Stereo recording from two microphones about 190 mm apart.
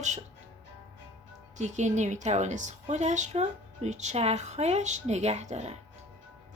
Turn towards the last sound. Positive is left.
turn(degrees=-35)  # may be behind; listen again after turning